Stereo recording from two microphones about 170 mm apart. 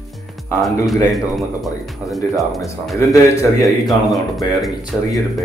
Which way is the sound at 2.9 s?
20° left (ahead or behind).